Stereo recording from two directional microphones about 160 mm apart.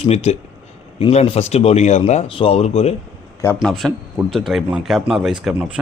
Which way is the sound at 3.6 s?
Centre (ahead or behind).